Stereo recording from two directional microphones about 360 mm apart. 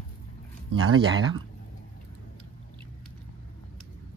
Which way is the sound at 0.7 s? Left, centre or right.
Right.